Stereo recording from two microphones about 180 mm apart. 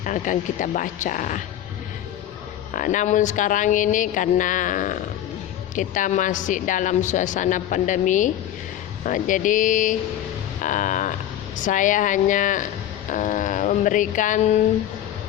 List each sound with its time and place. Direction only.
0.0 s a woman's voice: 45° left (ahead or behind)
2.7 s a woman's voice: 45° left (ahead or behind)